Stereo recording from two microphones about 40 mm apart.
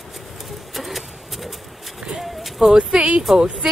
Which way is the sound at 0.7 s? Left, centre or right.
Centre.